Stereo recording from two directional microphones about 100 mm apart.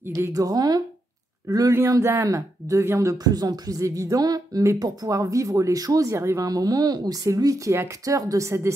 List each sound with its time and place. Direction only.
0.1 s speech: 35° right (ahead or behind)
3.3 s speech: 40° right (ahead or behind)